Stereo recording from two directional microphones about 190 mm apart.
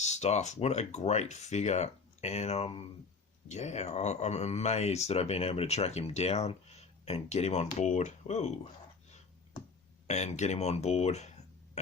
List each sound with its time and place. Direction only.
0.0 s speech: 35° left (ahead or behind)
10.1 s speech: 35° left (ahead or behind)